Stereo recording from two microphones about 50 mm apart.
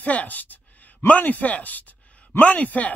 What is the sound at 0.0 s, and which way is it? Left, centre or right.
Speech, left.